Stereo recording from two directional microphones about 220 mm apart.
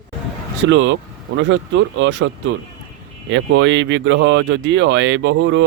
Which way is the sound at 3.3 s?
55° right (ahead or behind).